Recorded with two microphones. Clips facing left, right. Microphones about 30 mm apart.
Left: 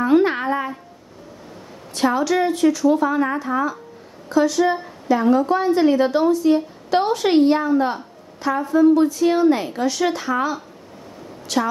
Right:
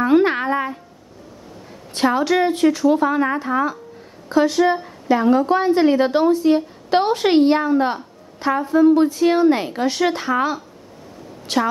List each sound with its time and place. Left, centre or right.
0.0 s a sound: right
2.0 s a woman's voice: right
11.4 s a woman's voice: right